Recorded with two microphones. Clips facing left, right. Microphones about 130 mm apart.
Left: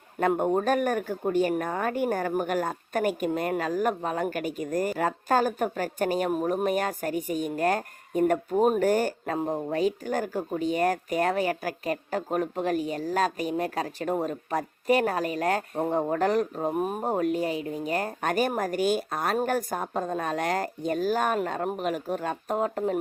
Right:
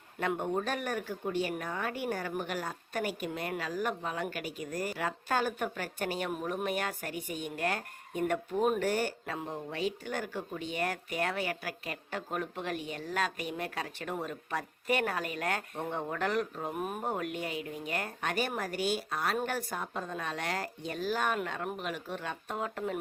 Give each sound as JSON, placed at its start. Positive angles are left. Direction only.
{"t": 0.2, "sound": "speech", "side_deg": 45}